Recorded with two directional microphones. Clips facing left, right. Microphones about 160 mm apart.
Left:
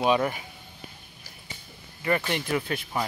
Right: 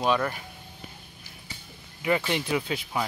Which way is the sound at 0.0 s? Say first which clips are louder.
Left 2 dB; 5° left (ahead or behind).